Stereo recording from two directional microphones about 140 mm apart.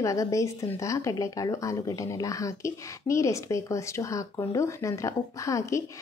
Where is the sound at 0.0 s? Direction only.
25° left (ahead or behind).